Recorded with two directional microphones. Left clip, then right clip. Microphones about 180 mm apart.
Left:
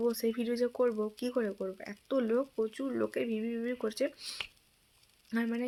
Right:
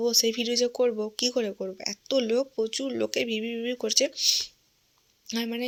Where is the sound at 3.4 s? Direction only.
45° right (ahead or behind).